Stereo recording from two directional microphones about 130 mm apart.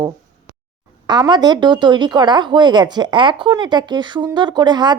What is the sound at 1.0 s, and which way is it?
Speech, 35° right (ahead or behind).